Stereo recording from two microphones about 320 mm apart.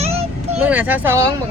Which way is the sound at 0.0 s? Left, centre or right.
Centre.